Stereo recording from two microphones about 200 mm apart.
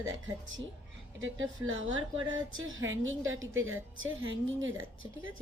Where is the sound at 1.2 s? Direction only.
75° right (ahead or behind).